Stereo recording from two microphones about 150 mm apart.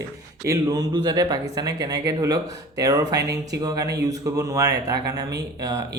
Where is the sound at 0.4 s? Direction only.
25° right (ahead or behind).